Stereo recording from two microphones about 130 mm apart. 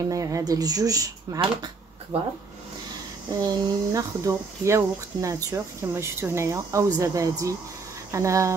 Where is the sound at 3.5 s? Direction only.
25° right (ahead or behind).